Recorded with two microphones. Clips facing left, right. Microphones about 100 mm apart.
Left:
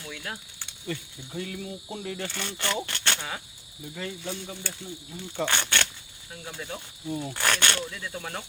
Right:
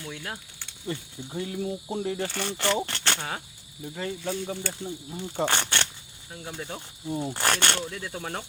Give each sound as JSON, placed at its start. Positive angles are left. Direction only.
{"t": 0.9, "sound": "speech", "side_deg": -25}